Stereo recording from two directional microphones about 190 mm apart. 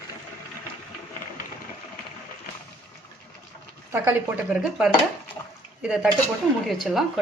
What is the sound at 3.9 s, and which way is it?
Speech, 10° right (ahead or behind).